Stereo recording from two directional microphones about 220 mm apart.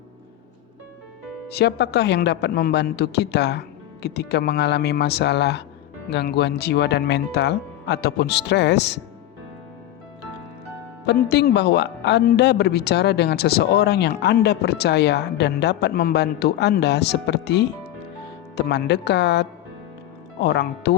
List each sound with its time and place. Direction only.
1.5 s a man's voice: 50° left (ahead or behind)
11.0 s a man's voice: 50° left (ahead or behind)